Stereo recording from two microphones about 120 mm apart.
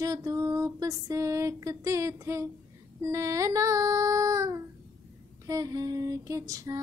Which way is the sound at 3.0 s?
25° right (ahead or behind).